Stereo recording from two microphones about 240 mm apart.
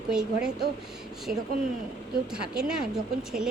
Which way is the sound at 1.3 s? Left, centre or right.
Right.